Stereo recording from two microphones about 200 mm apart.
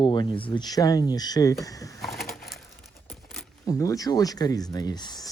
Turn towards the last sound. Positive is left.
turn(degrees=20)  # may be behind; listen again after turning